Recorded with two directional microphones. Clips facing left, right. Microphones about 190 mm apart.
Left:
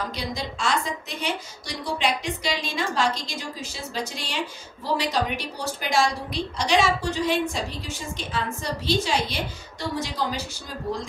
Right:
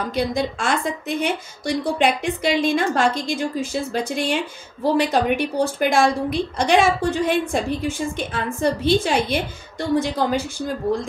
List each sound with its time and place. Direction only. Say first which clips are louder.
0.1 s a woman's voice: right 9 dB; 55° right (ahead or behind)